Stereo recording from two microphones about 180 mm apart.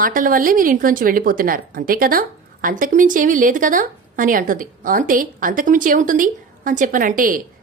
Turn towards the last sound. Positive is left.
turn(degrees=-50)  # may be behind; listen again after turning